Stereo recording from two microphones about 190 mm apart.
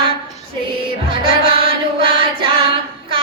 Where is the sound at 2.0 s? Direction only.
25° right (ahead or behind).